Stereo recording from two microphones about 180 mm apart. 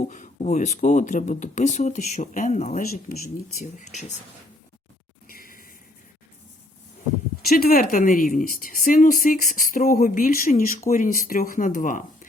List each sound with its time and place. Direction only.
0.0 s speech: 40° left (ahead or behind)
5.3 s a sound: 50° left (ahead or behind)
7.4 s a woman's voice: 55° left (ahead or behind)